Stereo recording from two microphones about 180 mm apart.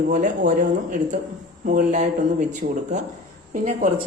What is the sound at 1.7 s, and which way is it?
A man's voice, 45° right (ahead or behind).